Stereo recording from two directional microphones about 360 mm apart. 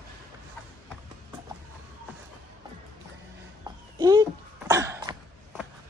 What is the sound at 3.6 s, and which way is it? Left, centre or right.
Cough, centre.